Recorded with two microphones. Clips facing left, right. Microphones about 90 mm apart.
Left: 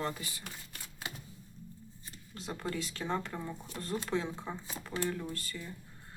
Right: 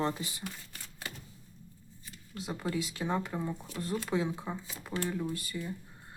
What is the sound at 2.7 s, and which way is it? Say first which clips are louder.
Speech: right 3 dB; 10° right (ahead or behind).